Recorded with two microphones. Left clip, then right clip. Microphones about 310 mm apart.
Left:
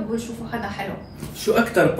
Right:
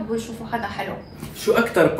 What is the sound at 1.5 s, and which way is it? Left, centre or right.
Speech, centre.